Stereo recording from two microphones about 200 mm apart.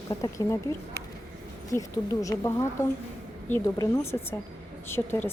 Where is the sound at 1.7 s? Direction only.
15° left (ahead or behind).